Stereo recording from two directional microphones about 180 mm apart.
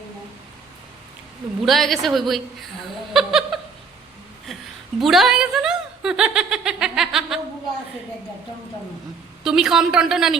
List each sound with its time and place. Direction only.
1.6 s speech: centre (ahead or behind)
3.1 s a sound: centre (ahead or behind)
4.9 s speech: centre (ahead or behind)
9.4 s speech: 5° right (ahead or behind)